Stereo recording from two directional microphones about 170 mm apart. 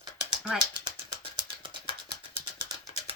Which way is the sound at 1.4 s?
30° right (ahead or behind).